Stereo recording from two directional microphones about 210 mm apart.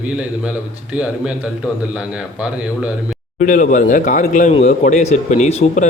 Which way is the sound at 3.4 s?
35° left (ahead or behind).